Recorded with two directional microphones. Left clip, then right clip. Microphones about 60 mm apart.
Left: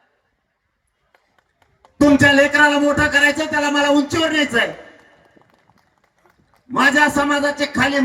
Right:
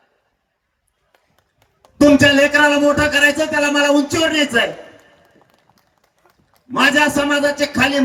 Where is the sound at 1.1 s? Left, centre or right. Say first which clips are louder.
Left 1 dB; right.